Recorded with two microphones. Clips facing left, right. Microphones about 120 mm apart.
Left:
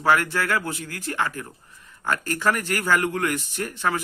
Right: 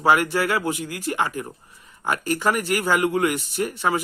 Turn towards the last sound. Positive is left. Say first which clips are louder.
# right 3 dB
turn(degrees=-15)  # may be behind; listen again after turning